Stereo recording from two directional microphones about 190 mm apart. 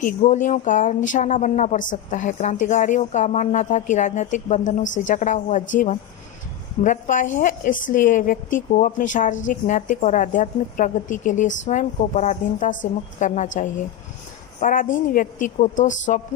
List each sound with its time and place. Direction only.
0.0 s a woman's voice: 40° left (ahead or behind)
14.6 s a woman's voice: 45° left (ahead or behind)